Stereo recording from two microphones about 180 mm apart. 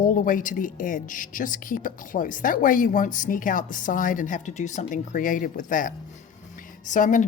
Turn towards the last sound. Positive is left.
turn(degrees=45)  # may be behind; listen again after turning